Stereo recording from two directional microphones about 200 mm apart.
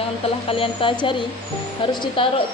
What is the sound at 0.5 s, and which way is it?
A woman's voice, 25° left (ahead or behind).